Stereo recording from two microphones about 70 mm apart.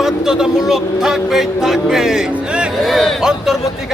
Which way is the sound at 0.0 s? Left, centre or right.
Centre.